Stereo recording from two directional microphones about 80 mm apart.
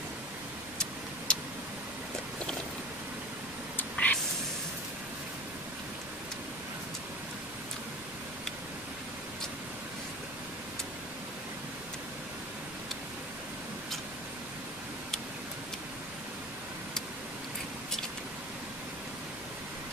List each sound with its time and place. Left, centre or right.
0.7 s tick-tock: centre
3.7 s whispering: centre